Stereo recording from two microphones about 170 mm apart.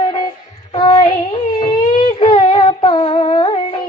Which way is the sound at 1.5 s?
30° left (ahead or behind).